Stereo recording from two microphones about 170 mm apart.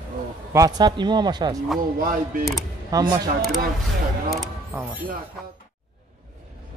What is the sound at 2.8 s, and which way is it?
Speech, 20° right (ahead or behind).